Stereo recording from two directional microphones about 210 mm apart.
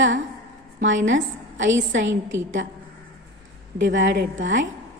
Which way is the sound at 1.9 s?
60° right (ahead or behind).